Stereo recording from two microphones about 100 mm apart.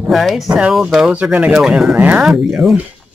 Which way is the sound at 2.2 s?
5° right (ahead or behind).